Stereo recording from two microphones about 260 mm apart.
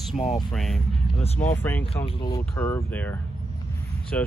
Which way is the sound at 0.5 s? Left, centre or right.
Centre.